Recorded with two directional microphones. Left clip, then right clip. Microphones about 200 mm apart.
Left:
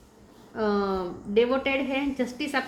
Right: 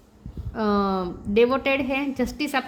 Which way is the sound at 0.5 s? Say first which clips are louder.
Right 3 dB; 50° right (ahead or behind).